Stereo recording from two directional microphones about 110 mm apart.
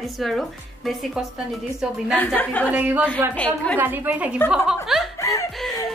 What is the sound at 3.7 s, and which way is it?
Speech, 15° right (ahead or behind).